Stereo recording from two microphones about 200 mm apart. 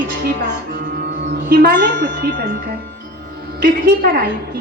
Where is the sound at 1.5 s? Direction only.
60° right (ahead or behind).